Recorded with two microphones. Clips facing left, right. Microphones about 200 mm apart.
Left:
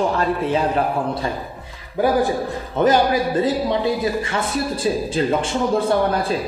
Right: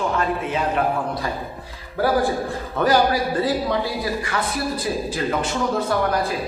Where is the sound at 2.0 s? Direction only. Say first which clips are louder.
Left 2 dB; 15° left (ahead or behind).